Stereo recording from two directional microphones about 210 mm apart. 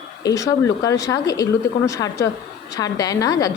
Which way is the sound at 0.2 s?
15° left (ahead or behind).